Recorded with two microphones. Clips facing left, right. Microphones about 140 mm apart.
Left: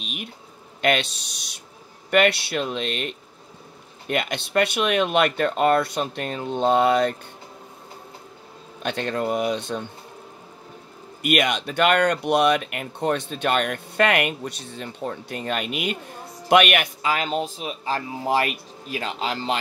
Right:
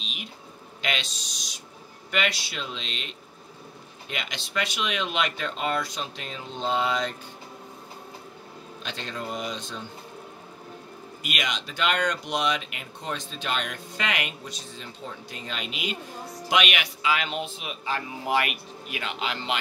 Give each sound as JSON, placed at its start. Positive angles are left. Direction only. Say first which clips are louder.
{"t": 0.0, "sound": "a sound", "louder": "left 6 dB", "side_deg": 55}
{"t": 0.8, "sound": "speech", "louder": "left 10 dB", "side_deg": 55}
{"t": 8.8, "sound": "speech", "louder": "left 10 dB", "side_deg": 60}
{"t": 11.2, "sound": "speech", "louder": "left 11 dB", "side_deg": 55}